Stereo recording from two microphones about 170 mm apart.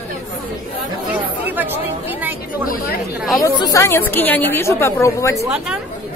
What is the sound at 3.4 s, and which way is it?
A woman's voice, 20° left (ahead or behind).